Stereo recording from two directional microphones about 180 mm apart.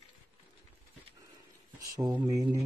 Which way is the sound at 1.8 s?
20° right (ahead or behind).